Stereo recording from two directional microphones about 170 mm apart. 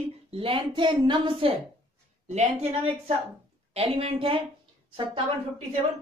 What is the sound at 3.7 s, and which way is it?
Speech, 35° right (ahead or behind).